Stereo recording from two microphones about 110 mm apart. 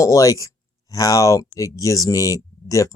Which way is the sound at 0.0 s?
30° left (ahead or behind).